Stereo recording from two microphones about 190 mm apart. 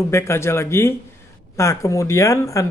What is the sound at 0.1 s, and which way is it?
A man's voice, 15° left (ahead or behind).